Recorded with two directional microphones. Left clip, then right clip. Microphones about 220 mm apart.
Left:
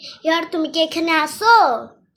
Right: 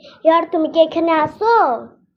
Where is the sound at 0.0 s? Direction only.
5° left (ahead or behind).